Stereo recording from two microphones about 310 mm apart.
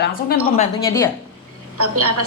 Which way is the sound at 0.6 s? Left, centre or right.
Centre.